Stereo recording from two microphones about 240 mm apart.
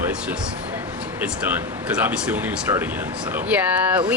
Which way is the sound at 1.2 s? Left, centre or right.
Centre.